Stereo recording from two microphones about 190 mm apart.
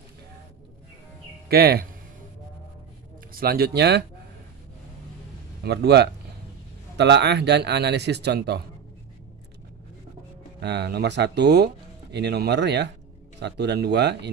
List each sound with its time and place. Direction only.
1.5 s speech: 55° right (ahead or behind)
3.3 s speech: 55° right (ahead or behind)
5.6 s speech: 60° right (ahead or behind)
10.6 s speech: 60° right (ahead or behind)